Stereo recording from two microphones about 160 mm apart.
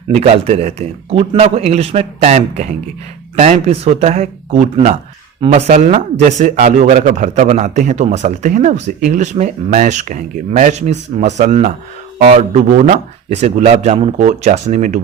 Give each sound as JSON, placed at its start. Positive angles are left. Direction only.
{"t": 0.2, "sound": "a man's voice", "side_deg": -40}